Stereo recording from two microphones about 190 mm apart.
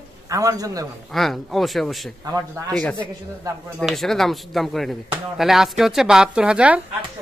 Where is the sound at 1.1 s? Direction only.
Centre (ahead or behind).